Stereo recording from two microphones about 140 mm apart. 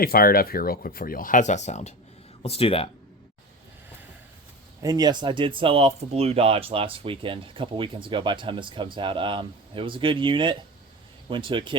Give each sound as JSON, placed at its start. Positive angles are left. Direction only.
{"t": 0.0, "sound": "speech", "side_deg": 90}
{"t": 2.4, "sound": "speech", "side_deg": 45}
{"t": 4.8, "sound": "speech", "side_deg": -25}